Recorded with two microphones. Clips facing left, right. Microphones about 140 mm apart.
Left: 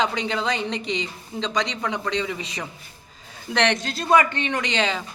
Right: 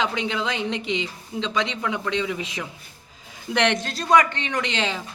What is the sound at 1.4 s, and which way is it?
Speech, 40° left (ahead or behind).